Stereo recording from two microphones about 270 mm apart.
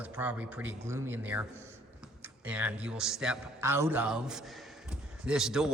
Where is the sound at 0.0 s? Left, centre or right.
Centre.